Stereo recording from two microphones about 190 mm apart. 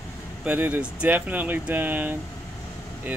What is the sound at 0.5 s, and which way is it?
Speech, 10° right (ahead or behind).